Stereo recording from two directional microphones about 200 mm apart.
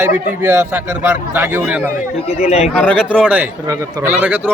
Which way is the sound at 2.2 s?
35° left (ahead or behind).